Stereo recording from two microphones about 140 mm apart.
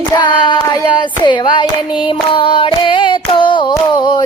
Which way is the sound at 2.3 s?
40° left (ahead or behind).